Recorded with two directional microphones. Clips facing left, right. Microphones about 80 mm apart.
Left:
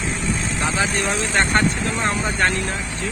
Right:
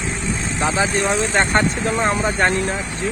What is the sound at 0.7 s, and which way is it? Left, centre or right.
Speech, right.